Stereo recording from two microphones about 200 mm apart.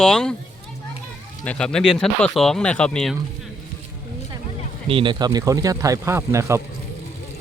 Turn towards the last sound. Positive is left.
turn(degrees=-15)  # may be behind; listen again after turning